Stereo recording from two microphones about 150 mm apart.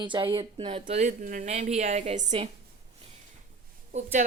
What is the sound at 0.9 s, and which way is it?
A woman's voice, 50° right (ahead or behind).